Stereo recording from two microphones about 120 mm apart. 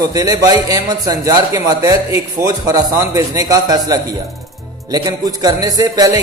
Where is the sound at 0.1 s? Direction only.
30° right (ahead or behind).